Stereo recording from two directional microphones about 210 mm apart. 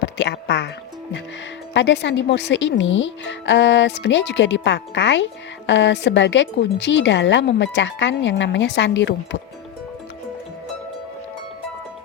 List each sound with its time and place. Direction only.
0.0 s speech: 55° left (ahead or behind)
1.7 s speech: 55° left (ahead or behind)